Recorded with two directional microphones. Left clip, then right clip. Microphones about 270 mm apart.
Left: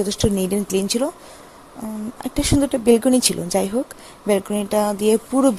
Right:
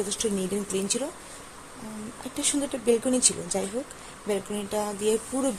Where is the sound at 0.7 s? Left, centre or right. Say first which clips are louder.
Left 8 dB; left.